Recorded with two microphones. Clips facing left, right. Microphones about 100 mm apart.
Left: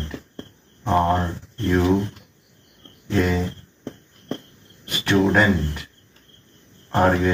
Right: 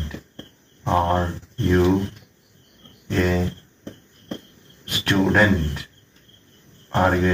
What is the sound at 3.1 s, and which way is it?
Cricket, centre (ahead or behind).